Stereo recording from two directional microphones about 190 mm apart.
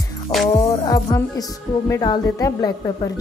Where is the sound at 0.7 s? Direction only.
20° left (ahead or behind).